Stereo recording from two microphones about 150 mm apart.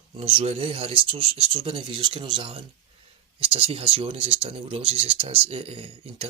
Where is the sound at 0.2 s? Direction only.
40° right (ahead or behind).